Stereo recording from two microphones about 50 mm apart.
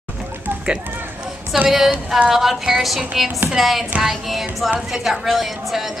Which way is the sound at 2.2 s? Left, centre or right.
Centre.